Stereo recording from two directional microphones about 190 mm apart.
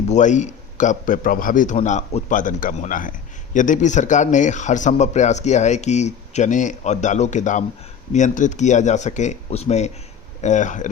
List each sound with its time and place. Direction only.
0.1 s a man's voice: 40° left (ahead or behind)